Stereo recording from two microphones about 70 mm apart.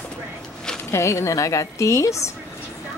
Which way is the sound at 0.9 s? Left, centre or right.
Left.